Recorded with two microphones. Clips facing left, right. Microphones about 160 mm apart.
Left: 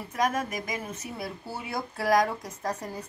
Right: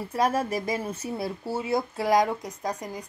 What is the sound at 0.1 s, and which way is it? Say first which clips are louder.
Speech: right 3 dB; 30° right (ahead or behind).